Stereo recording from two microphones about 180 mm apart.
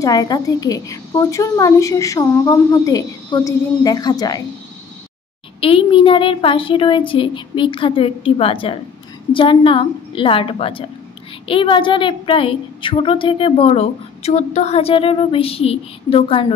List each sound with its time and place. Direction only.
0.0 s a woman's voice: 20° left (ahead or behind)
5.6 s a woman's voice: 30° left (ahead or behind)